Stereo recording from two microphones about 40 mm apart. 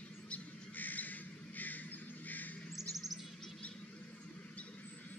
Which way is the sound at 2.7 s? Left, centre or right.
Centre.